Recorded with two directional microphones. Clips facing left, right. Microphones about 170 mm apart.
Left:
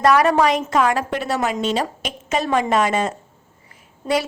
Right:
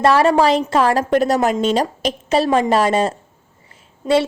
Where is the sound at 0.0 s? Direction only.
30° right (ahead or behind).